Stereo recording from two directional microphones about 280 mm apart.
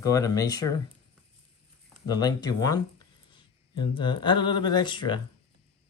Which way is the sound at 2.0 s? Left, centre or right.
Centre.